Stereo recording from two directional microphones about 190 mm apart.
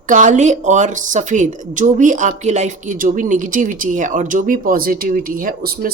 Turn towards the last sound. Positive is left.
turn(degrees=-50)  # may be behind; listen again after turning